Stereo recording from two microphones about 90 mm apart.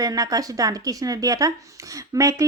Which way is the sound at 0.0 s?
45° right (ahead or behind).